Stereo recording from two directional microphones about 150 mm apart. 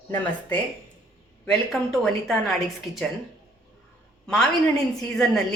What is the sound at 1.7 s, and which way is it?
A woman's voice, centre (ahead or behind).